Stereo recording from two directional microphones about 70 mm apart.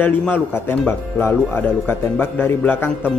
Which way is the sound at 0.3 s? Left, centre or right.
Left.